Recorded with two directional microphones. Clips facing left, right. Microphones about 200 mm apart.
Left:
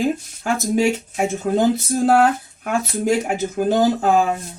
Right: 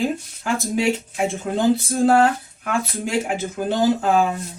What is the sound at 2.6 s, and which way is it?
Speech, 40° left (ahead or behind).